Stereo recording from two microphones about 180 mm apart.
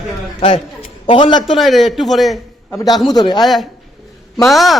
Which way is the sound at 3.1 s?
25° left (ahead or behind).